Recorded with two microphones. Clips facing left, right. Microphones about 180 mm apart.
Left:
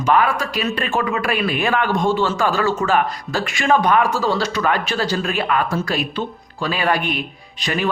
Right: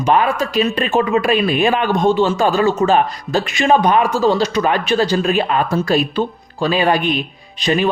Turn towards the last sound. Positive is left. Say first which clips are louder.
# right 6 dB
turn(degrees=-25)  # may be behind; listen again after turning